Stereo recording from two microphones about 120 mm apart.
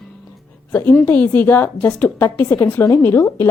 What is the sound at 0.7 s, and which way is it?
A woman's voice, 15° left (ahead or behind).